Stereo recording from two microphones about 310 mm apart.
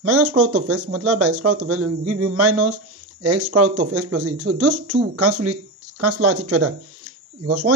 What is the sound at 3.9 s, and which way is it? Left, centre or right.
Speech, right.